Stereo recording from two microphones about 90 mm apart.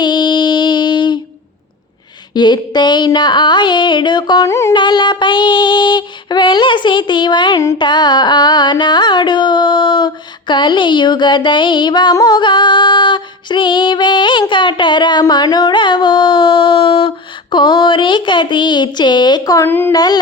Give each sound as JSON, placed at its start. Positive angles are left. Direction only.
{"t": 0.0, "sound": "female singing", "side_deg": 55}
{"t": 2.3, "sound": "female singing", "side_deg": 55}
{"t": 4.4, "sound": "carnatic music", "side_deg": 35}
{"t": 4.7, "sound": "female singing", "side_deg": 60}
{"t": 7.8, "sound": "carnatic music", "side_deg": 55}
{"t": 12.1, "sound": "female singing", "side_deg": 50}
{"t": 17.5, "sound": "female singing", "side_deg": 55}
{"t": 19.6, "sound": "speech", "side_deg": 25}
{"t": 19.9, "sound": "a sound", "side_deg": 45}